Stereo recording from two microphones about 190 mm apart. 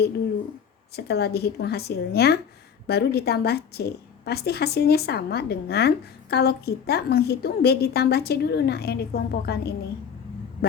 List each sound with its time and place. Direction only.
0.9 s a woman's voice: 60° left (ahead or behind)